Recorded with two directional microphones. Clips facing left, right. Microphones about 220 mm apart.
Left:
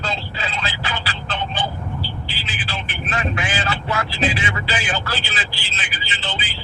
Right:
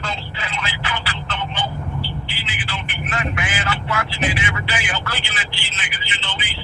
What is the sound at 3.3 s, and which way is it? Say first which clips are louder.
Vehicle: left 1 dB; 30° left (ahead or behind).